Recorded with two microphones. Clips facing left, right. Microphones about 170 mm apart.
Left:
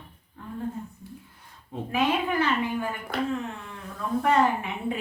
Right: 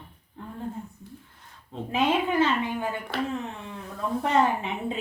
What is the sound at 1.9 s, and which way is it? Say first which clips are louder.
Speech: right 2 dB; 20° right (ahead or behind).